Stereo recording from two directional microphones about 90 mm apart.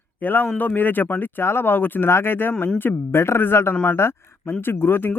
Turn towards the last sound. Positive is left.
turn(degrees=25)  # may be behind; listen again after turning